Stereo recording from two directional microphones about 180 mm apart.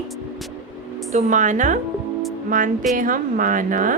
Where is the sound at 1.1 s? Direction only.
45° right (ahead or behind).